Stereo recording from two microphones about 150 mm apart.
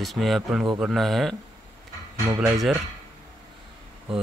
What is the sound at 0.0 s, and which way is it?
Speech, centre (ahead or behind).